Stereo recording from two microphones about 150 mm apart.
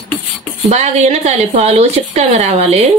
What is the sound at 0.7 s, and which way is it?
A woman's voice, 50° right (ahead or behind).